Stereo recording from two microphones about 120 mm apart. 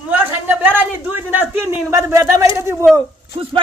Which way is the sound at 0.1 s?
15° right (ahead or behind).